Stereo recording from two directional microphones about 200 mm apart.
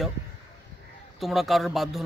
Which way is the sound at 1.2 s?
Centre (ahead or behind).